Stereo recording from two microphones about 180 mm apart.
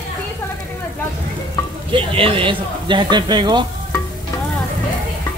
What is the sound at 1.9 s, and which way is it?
Speech, 30° right (ahead or behind).